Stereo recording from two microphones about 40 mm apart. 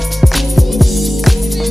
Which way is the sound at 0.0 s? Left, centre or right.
Centre.